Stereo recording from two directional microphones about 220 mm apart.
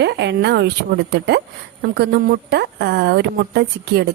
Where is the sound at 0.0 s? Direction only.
50° right (ahead or behind).